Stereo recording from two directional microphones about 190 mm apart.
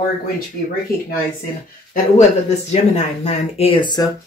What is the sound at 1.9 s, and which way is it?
Speech, 35° left (ahead or behind).